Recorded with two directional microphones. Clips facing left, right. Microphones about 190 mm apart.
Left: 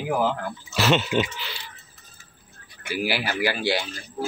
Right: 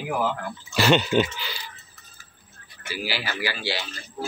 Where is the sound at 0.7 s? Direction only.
Centre (ahead or behind).